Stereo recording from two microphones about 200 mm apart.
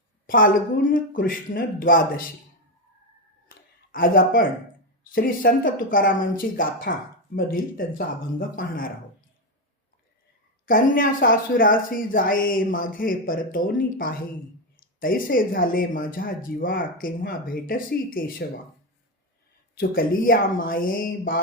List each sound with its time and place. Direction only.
0.3 s speech: 45° left (ahead or behind)
3.9 s speech: 45° left (ahead or behind)
10.7 s speech: 45° left (ahead or behind)
14.8 s a sound: 45° left (ahead or behind)
15.6 s speech: 45° left (ahead or behind)
19.8 s speech: 45° left (ahead or behind)